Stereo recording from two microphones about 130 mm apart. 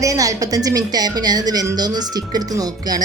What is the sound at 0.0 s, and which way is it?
A woman's voice, 25° right (ahead or behind).